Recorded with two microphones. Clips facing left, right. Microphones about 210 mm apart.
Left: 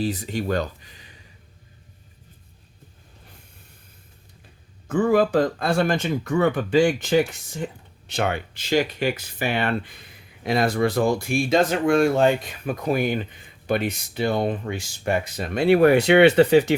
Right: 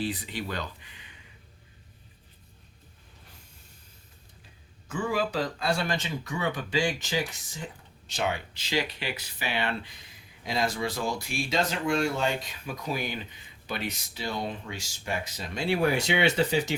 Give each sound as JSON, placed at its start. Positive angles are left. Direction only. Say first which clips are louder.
{"t": 0.0, "sound": "speech", "louder": "left 7 dB", "side_deg": 45}
{"t": 4.9, "sound": "speech", "louder": "left 10 dB", "side_deg": 50}